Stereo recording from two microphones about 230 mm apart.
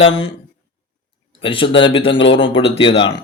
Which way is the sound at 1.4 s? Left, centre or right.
Left.